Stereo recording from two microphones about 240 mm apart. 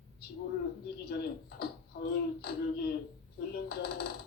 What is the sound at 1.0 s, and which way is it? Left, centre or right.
Speech, left.